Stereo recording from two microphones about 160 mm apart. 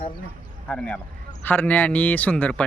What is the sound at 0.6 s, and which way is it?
Speech, 5° left (ahead or behind).